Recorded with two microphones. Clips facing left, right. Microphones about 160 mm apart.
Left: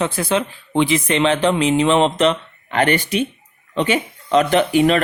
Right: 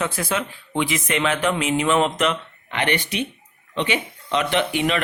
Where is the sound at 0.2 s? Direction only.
30° left (ahead or behind).